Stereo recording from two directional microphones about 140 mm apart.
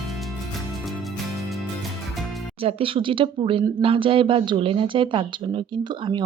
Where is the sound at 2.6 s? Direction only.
40° right (ahead or behind).